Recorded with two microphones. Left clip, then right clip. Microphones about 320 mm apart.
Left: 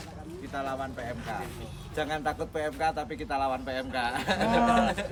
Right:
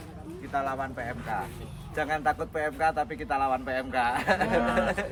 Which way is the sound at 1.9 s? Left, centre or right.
Centre.